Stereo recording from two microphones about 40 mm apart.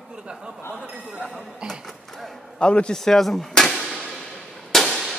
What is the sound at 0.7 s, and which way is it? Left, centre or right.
Speech, right.